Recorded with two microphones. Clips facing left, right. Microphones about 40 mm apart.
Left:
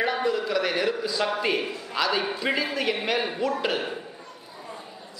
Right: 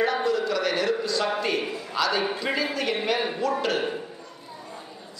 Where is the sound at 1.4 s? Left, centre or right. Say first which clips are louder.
Left 1 dB; centre.